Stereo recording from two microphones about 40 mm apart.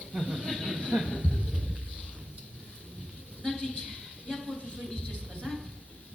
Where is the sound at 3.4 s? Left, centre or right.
Centre.